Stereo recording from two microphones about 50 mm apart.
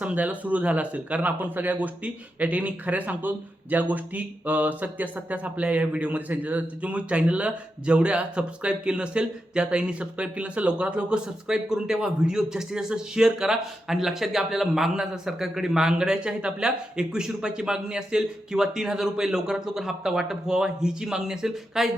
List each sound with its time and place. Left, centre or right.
0.0 s speech: right; by 21.8 s centre